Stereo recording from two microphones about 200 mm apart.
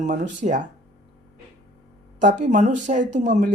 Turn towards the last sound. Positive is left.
turn(degrees=-35)  # may be behind; listen again after turning